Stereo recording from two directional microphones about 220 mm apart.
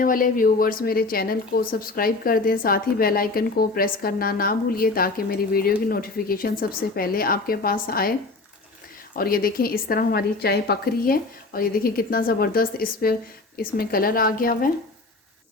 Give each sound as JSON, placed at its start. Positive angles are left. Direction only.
{"t": 0.0, "sound": "speech", "side_deg": 40}
{"t": 9.1, "sound": "a woman's voice", "side_deg": 40}